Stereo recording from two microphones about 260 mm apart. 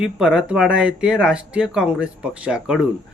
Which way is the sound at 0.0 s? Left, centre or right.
Centre.